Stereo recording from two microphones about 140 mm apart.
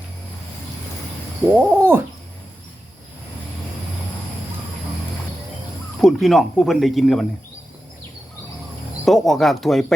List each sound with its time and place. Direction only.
1.5 s a sound: 15° right (ahead or behind)
6.0 s speech: centre (ahead or behind)
9.0 s speech: centre (ahead or behind)